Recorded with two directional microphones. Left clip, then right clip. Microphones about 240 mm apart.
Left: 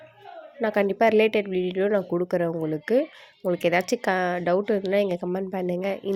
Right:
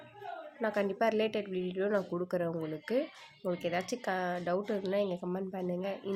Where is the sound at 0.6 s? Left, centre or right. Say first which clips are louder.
Left 10 dB; left.